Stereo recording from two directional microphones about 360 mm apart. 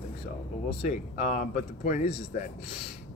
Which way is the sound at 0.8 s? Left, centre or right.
Centre.